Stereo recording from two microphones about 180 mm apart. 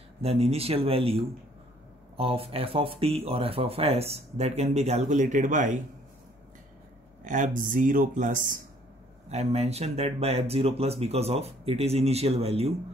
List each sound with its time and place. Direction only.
0.2 s speech: 35° right (ahead or behind)
7.2 s speech: 45° right (ahead or behind)
9.3 s speech: 35° right (ahead or behind)